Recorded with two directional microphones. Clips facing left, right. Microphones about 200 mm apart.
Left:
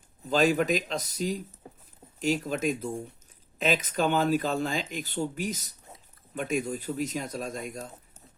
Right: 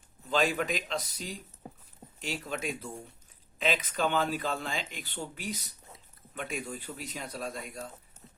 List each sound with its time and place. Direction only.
0.3 s speech: 40° left (ahead or behind)